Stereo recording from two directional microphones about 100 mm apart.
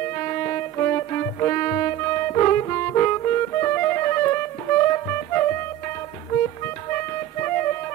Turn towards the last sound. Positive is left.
turn(degrees=25)  # may be behind; listen again after turning